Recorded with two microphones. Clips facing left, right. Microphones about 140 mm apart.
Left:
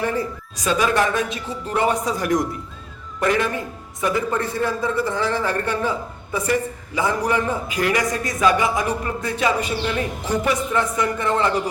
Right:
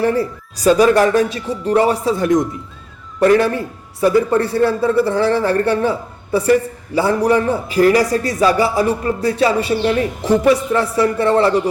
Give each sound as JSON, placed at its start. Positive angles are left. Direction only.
{"t": 0.0, "sound": "a man's voice", "side_deg": -35}
{"t": 3.2, "sound": "a man's voice", "side_deg": -35}